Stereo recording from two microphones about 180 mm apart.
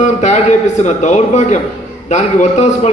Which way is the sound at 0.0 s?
40° left (ahead or behind).